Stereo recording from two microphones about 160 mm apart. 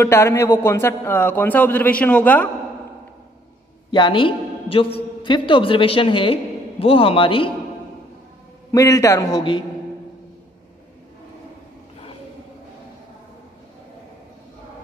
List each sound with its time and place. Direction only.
0.0 s a man's voice: 15° left (ahead or behind)
3.9 s a man's voice: 30° left (ahead or behind)
8.7 s a man's voice: 20° left (ahead or behind)